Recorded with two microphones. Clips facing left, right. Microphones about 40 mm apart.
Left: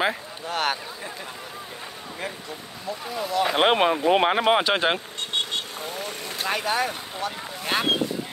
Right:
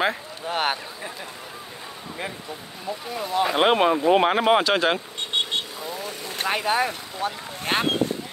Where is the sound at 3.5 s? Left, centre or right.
Centre.